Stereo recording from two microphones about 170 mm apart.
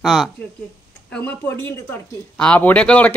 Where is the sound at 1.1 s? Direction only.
10° left (ahead or behind).